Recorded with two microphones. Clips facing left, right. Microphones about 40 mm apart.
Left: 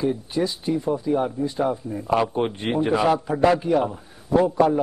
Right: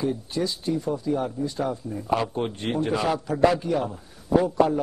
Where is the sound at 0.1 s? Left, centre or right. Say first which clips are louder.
Left 3 dB; centre.